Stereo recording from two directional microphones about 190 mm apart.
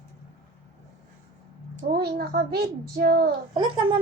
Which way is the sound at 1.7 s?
55° right (ahead or behind).